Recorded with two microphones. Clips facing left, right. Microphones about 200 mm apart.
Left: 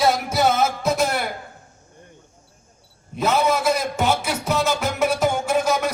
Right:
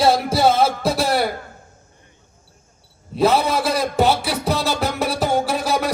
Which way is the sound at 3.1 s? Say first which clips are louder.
Right 3 dB; 35° right (ahead or behind).